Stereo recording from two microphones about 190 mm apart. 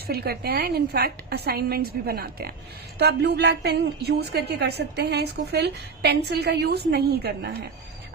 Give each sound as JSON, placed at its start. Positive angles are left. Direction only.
{"t": 0.1, "sound": "a woman's voice", "side_deg": -55}